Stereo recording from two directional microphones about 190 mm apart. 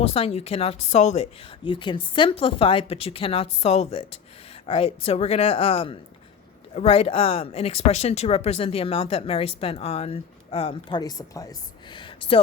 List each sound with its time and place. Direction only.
0.0 s speech: 30° left (ahead or behind)